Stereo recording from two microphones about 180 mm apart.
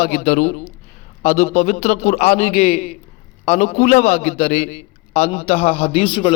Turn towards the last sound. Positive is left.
turn(degrees=30)  # may be behind; listen again after turning